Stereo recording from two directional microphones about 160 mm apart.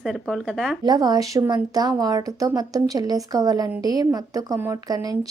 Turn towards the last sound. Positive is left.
turn(degrees=-25)  # may be behind; listen again after turning